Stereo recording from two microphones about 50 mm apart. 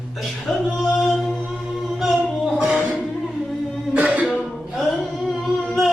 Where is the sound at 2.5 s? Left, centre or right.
Centre.